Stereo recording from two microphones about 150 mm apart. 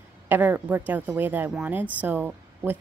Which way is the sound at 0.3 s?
10° right (ahead or behind).